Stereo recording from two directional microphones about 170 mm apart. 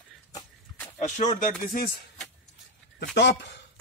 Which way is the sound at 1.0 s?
45° left (ahead or behind).